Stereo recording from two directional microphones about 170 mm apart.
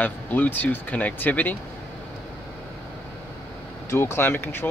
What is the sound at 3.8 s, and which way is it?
Speech, 15° left (ahead or behind).